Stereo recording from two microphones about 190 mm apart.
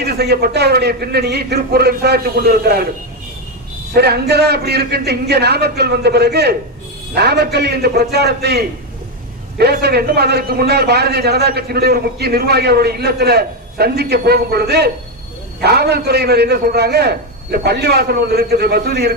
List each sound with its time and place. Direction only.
0.0 s a man's voice: 55° right (ahead or behind)
3.9 s a man's voice: 60° right (ahead or behind)